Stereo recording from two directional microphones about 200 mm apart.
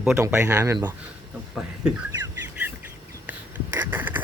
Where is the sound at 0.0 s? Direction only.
10° right (ahead or behind).